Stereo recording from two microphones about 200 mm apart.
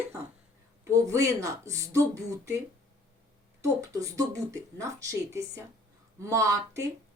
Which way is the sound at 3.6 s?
15° right (ahead or behind).